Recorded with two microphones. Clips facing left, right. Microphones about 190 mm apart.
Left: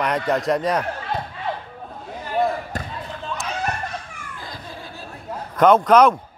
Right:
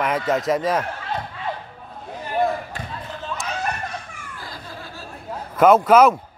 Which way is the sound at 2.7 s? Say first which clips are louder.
Left 4 dB; 40° left (ahead or behind).